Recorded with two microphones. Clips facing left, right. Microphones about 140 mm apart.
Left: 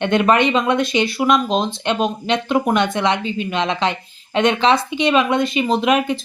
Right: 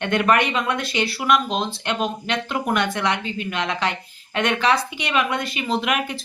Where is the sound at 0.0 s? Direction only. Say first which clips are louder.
Left 4 dB; 20° left (ahead or behind).